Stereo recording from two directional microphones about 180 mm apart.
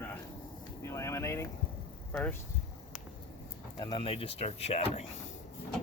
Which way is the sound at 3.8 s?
30° left (ahead or behind).